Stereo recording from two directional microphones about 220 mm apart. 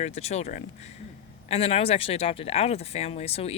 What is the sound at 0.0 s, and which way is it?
Speech, 30° left (ahead or behind).